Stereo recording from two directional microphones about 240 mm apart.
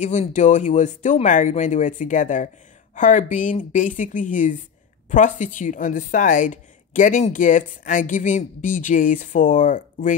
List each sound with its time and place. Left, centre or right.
0.0 s a woman's voice: left